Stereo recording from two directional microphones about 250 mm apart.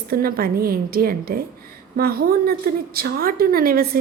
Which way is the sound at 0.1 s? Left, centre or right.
Right.